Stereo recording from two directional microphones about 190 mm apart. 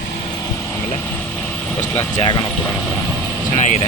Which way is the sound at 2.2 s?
25° left (ahead or behind).